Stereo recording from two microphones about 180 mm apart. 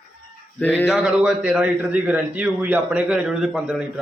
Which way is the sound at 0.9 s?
5° right (ahead or behind).